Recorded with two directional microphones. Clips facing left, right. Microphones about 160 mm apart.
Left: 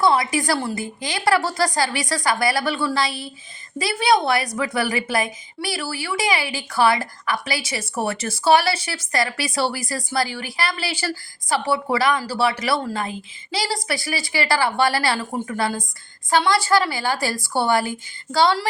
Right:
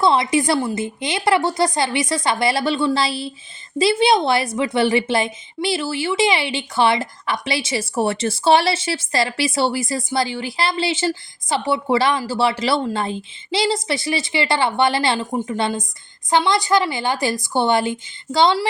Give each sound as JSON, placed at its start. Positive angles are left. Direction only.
{"t": 0.0, "sound": "a woman's voice", "side_deg": -25}